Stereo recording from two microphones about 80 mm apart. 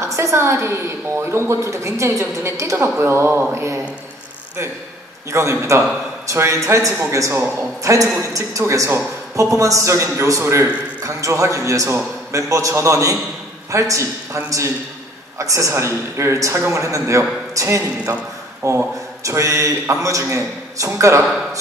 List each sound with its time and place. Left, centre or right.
0.0 s a woman's voice: right
5.3 s a woman's voice: right